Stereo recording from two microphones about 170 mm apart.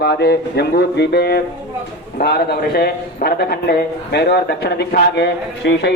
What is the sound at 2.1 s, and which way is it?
A man's voice, 70° left (ahead or behind).